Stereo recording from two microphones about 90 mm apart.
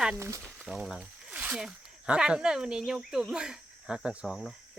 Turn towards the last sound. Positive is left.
turn(degrees=0)  # may be behind; listen again after turning